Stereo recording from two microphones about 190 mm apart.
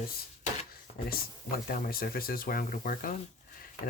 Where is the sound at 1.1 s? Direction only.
50° left (ahead or behind).